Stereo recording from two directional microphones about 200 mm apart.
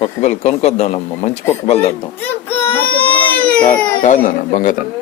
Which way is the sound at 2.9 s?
10° left (ahead or behind).